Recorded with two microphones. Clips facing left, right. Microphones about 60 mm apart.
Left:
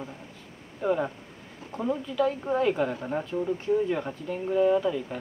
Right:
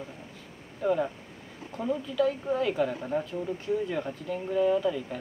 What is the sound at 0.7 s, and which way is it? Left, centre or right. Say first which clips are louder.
Speech: even; left.